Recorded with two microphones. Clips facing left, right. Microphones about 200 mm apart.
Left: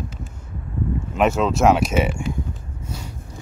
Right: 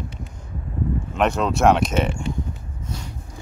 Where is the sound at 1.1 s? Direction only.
5° left (ahead or behind).